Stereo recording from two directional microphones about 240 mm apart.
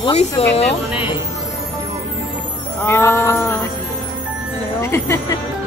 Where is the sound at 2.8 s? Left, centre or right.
Centre.